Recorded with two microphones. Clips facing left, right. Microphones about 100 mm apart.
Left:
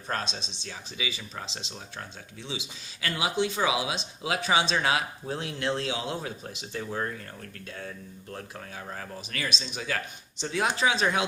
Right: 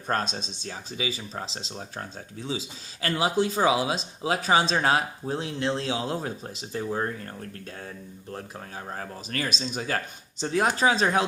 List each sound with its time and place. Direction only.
0.1 s speech: 45° right (ahead or behind)